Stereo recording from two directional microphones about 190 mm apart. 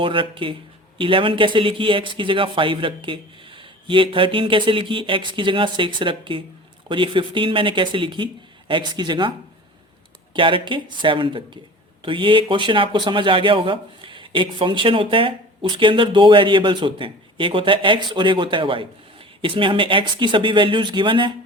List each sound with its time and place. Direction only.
0.0 s a man's voice: 25° right (ahead or behind)
10.3 s a man's voice: 25° right (ahead or behind)